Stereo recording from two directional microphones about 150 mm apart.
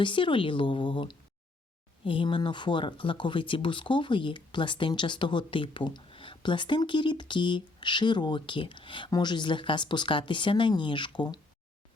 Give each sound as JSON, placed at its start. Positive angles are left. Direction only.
{"t": 0.0, "sound": "speech", "side_deg": 35}